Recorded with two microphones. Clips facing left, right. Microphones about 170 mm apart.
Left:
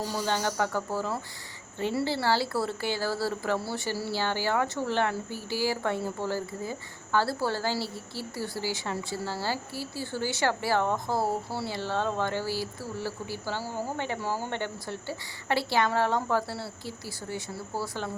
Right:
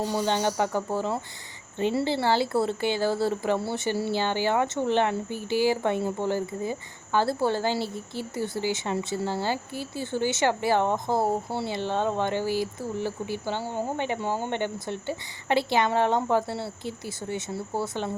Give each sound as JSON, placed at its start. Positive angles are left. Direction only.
{"t": 0.0, "sound": "speech", "side_deg": -20}